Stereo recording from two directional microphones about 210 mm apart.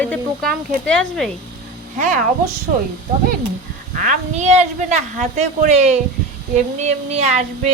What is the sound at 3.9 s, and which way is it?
A woman's voice, 35° right (ahead or behind).